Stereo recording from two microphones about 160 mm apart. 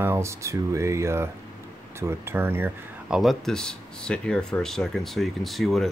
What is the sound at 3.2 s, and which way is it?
Speech, centre (ahead or behind).